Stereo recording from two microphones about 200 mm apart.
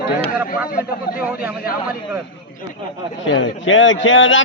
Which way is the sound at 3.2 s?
70° left (ahead or behind).